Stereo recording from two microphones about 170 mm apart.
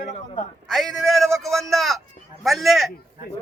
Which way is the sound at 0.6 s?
Centre (ahead or behind).